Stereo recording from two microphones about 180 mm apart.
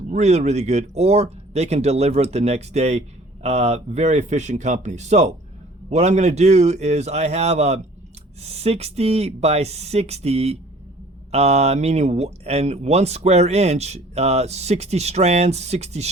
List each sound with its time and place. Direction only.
0.1 s speech: 40° right (ahead or behind)